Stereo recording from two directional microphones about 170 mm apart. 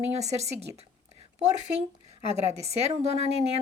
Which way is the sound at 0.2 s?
40° right (ahead or behind).